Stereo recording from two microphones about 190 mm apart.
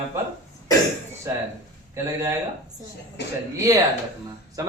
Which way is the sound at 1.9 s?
15° right (ahead or behind).